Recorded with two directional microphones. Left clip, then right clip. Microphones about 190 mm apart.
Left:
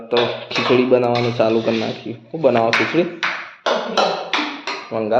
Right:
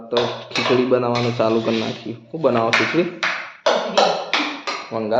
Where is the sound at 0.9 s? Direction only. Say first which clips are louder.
Left 3 dB; 5° left (ahead or behind).